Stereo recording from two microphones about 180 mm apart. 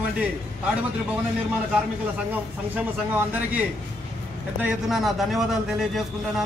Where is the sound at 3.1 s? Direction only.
10° right (ahead or behind).